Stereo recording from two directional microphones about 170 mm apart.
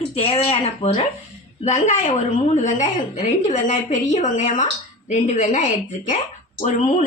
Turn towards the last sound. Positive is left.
turn(degrees=45)  # may be behind; listen again after turning